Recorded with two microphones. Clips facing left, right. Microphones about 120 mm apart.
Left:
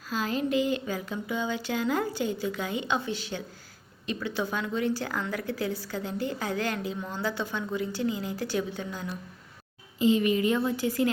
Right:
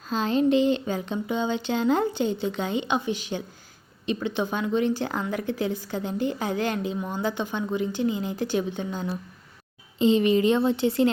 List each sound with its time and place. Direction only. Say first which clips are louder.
0.1 s speech: right 6 dB; 25° right (ahead or behind)